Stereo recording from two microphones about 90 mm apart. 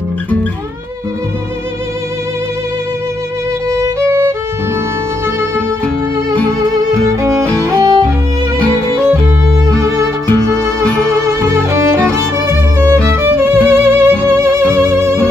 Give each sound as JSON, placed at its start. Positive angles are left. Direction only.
{"t": 3.7, "sound": "music", "side_deg": -30}
{"t": 7.1, "sound": "music", "side_deg": -35}
{"t": 10.2, "sound": "music", "side_deg": 20}
{"t": 11.5, "sound": "music", "side_deg": -30}